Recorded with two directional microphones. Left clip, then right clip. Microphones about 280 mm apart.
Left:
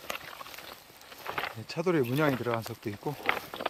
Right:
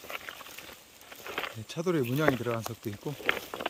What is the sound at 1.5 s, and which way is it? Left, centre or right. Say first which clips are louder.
Speech: left 2 dB; centre.